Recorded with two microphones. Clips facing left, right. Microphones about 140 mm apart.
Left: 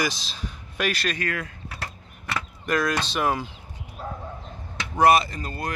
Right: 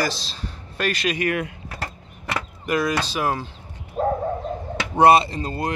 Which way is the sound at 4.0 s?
55° right (ahead or behind).